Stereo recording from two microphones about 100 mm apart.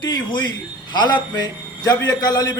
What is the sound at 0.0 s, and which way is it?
A man's voice, 50° left (ahead or behind).